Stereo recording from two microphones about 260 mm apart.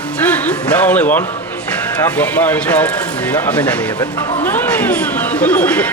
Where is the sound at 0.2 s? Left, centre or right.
Centre.